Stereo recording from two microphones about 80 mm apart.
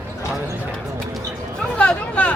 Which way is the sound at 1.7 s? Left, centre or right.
Centre.